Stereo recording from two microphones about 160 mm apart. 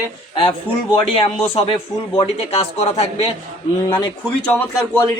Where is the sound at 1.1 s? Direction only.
35° left (ahead or behind).